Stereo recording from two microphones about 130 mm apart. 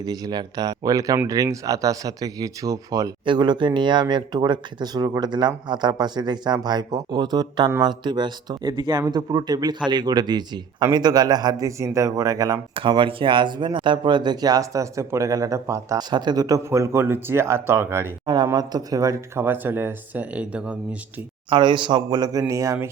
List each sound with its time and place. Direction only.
0.0 s speech: 30° right (ahead or behind)
12.9 s speech: 40° right (ahead or behind); by 18.1 s 20° right (ahead or behind)
18.5 s speech: 30° right (ahead or behind); by 20.7 s 10° right (ahead or behind)
21.5 s speech: 40° right (ahead or behind)